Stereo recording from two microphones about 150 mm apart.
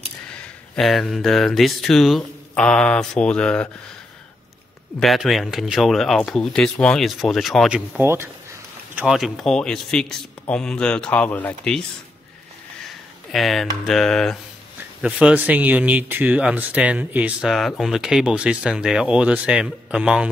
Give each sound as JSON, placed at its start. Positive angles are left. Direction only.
{"t": 0.7, "sound": "speech", "side_deg": 0}
{"t": 5.0, "sound": "speech", "side_deg": 0}
{"t": 8.0, "sound": "speech", "side_deg": -15}
{"t": 8.9, "sound": "speech", "side_deg": -5}
{"t": 13.3, "sound": "speech", "side_deg": 0}